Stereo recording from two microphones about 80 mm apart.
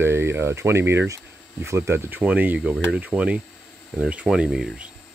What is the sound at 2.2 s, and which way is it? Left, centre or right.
Speech, centre.